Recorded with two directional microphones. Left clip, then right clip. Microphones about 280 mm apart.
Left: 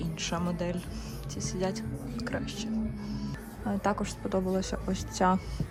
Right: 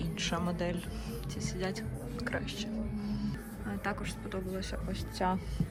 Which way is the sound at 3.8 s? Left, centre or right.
Centre.